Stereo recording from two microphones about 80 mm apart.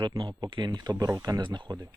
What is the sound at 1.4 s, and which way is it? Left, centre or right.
Speech, right.